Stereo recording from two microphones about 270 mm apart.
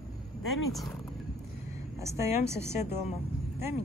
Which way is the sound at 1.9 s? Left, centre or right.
Centre.